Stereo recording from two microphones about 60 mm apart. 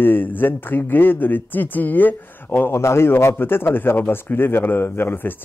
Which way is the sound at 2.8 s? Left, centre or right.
Left.